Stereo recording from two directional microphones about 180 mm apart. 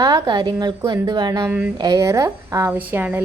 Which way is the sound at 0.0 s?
20° right (ahead or behind).